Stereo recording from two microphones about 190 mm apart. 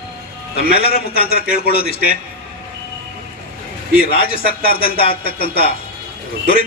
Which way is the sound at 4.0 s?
50° left (ahead or behind).